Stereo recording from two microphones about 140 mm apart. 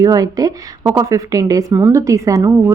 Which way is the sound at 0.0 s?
25° right (ahead or behind).